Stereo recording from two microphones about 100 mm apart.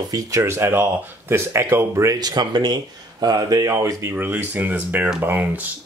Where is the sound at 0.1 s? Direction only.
30° right (ahead or behind).